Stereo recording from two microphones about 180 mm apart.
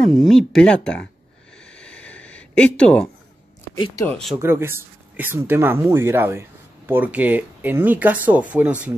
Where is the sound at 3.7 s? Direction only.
25° left (ahead or behind).